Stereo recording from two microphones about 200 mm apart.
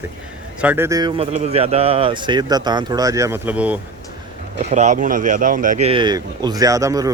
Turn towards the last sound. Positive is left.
turn(degrees=-15)  # may be behind; listen again after turning